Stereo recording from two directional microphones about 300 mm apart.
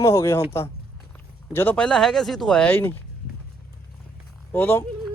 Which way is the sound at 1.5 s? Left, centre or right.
Centre.